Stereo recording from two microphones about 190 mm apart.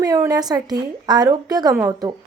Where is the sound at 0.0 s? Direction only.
20° right (ahead or behind).